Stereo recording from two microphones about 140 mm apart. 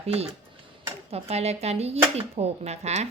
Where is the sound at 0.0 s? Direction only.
45° right (ahead or behind).